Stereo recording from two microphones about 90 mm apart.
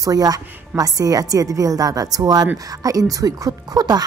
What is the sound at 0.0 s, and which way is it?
A woman's voice, 45° right (ahead or behind).